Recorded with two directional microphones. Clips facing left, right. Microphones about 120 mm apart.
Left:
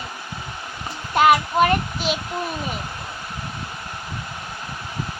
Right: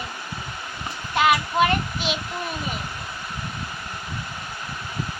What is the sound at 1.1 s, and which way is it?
Child singing, 45° left (ahead or behind).